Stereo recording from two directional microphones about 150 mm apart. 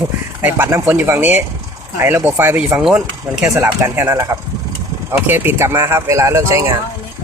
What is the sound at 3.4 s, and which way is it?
Speech, 20° right (ahead or behind).